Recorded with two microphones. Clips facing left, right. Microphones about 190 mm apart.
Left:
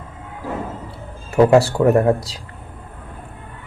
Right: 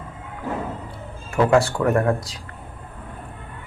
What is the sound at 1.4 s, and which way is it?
Speech, 30° left (ahead or behind).